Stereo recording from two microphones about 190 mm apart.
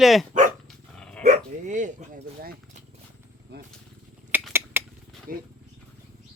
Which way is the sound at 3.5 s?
60° right (ahead or behind).